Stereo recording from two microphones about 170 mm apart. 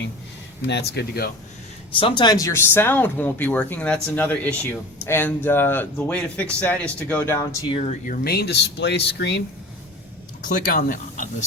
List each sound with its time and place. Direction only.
0.7 s speech: 75° left (ahead or behind)
2.0 s speech: 30° left (ahead or behind); by 7.3 s 10° left (ahead or behind)
7.5 s speech: 30° left (ahead or behind)
7.9 s speech: 50° left (ahead or behind); by 9.4 s 80° left
10.4 s speech: 55° left (ahead or behind)